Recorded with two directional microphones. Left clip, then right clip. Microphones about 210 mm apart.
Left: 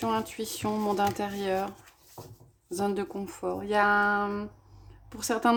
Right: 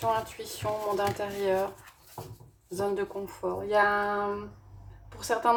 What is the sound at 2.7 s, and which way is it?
Speech, 50° left (ahead or behind).